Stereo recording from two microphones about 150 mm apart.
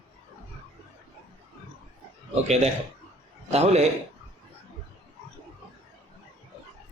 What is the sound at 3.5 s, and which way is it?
Speech, 45° right (ahead or behind).